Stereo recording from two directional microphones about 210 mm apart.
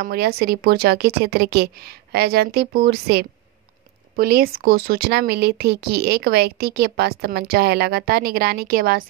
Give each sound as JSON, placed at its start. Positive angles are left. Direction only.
{"t": 0.0, "sound": "speech", "side_deg": -45}